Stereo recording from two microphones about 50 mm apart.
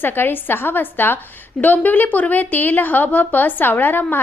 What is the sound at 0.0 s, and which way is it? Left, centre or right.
A woman's voice, left.